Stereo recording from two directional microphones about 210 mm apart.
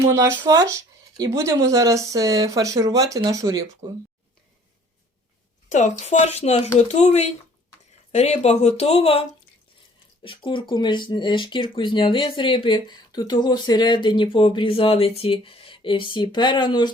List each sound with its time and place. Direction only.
0.0 s speech: 15° right (ahead or behind)
5.7 s speech: 35° left (ahead or behind)
10.2 s speech: 25° left (ahead or behind)